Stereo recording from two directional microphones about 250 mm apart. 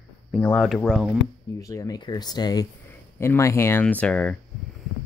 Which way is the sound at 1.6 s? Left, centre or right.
Centre.